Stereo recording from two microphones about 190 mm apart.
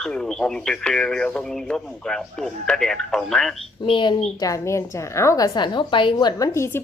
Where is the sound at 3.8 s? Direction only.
25° left (ahead or behind).